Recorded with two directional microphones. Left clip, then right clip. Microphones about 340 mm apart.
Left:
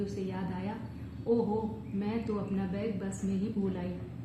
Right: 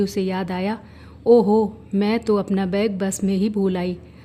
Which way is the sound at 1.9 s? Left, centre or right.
Right.